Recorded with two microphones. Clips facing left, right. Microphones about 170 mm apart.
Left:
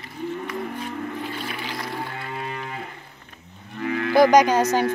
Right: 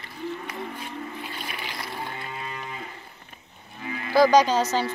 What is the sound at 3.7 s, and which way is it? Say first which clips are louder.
Cattle: left 7 dB; 65° left (ahead or behind).